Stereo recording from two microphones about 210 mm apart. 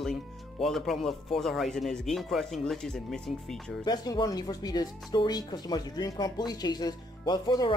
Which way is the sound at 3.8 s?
20° left (ahead or behind).